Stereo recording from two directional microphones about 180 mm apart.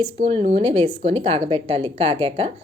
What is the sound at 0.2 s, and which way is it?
A woman's voice, 35° right (ahead or behind).